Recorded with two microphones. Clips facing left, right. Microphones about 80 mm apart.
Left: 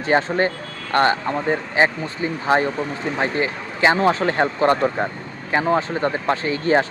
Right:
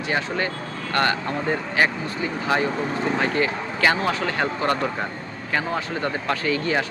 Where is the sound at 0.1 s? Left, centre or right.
Left.